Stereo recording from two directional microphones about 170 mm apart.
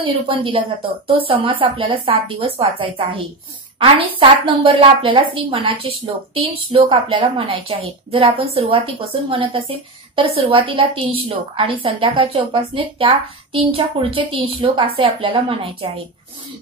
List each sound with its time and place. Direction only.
0.0 s a woman's voice: 30° right (ahead or behind)